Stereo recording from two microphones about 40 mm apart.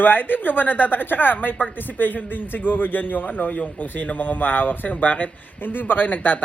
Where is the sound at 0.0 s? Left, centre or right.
Left.